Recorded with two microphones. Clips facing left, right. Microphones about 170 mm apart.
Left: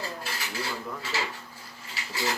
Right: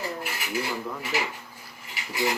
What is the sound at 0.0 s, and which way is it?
Dishes, 15° right (ahead or behind).